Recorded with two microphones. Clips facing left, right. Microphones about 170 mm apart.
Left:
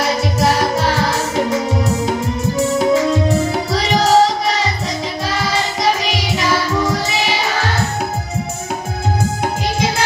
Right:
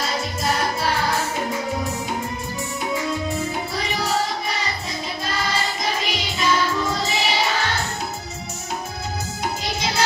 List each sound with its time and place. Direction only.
0.0 s music: 80° left